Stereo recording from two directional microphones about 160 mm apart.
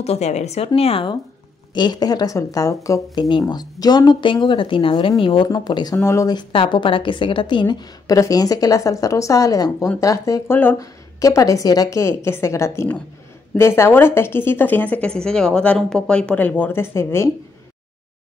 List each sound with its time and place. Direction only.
0.0 s a woman's voice: 45° left (ahead or behind); by 17.3 s 15° left (ahead or behind)